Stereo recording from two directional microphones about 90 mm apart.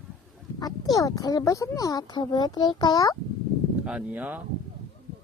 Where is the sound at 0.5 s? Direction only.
45° left (ahead or behind).